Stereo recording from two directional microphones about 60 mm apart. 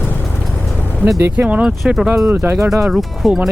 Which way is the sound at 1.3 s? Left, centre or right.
Right.